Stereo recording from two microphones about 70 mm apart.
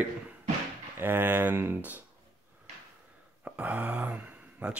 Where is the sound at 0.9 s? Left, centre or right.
Right.